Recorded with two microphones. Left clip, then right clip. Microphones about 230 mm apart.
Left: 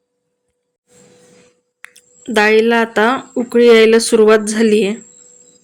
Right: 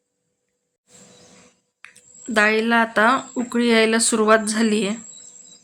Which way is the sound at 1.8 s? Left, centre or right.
Centre.